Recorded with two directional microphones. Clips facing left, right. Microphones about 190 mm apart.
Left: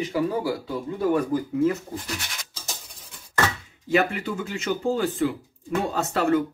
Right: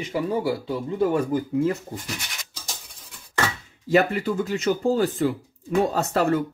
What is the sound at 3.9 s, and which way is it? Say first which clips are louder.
Speech: right 3 dB; 40° right (ahead or behind).